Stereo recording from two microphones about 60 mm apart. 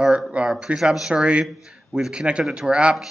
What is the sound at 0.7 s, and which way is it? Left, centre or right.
Speech, centre.